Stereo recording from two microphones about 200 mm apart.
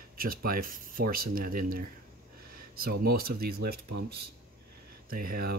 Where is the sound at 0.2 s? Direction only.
45° right (ahead or behind).